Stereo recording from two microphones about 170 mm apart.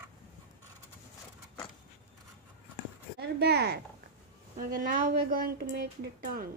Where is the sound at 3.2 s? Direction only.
70° right (ahead or behind).